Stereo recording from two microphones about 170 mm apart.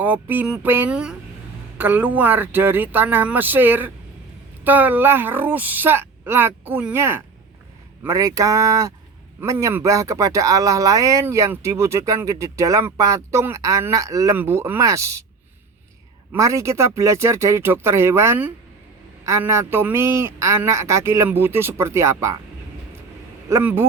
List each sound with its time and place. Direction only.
0.0 s speech: 10° right (ahead or behind)
16.3 s speech: 15° right (ahead or behind)
23.5 s speech: 15° right (ahead or behind)